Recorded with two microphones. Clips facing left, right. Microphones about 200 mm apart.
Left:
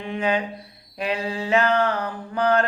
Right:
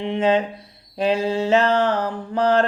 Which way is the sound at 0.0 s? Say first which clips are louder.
Right 5 dB; 25° right (ahead or behind).